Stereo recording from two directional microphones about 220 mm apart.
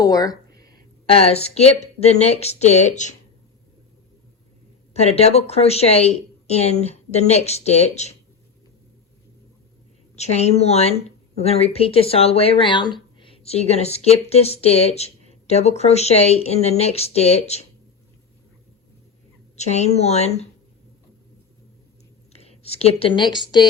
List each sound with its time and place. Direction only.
0.0 s a sound: 15° left (ahead or behind)
1.0 s a woman's voice: 25° left (ahead or behind)
4.9 s a woman's voice: 30° left (ahead or behind)
10.2 s a woman's voice: 30° left (ahead or behind)
19.5 s a woman's voice: 30° left (ahead or behind)
22.3 s a woman's voice: 30° left (ahead or behind)